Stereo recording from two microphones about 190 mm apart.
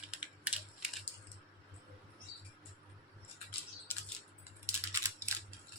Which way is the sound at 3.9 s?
10° left (ahead or behind).